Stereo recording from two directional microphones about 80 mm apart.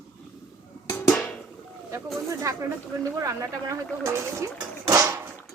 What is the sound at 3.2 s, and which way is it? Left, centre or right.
Speech, right.